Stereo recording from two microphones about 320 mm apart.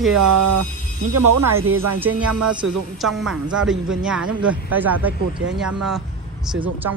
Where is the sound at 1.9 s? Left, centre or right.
Centre.